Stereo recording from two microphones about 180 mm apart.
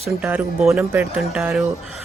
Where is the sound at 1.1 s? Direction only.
Centre (ahead or behind).